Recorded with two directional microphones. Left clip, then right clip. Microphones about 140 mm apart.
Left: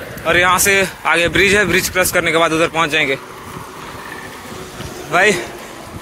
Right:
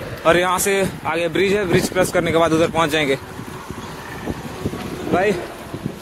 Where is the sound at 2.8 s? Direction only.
40° right (ahead or behind).